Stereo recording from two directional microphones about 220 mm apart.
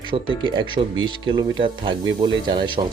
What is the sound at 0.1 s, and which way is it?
Speech, 20° right (ahead or behind).